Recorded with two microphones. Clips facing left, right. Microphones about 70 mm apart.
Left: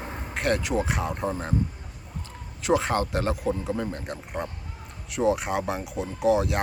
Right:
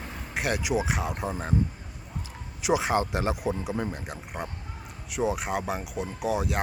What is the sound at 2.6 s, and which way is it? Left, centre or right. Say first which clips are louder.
Speech: left 1 dB; centre.